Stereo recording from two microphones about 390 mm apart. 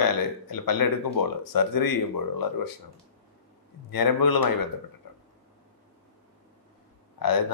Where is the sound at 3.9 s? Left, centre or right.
Left.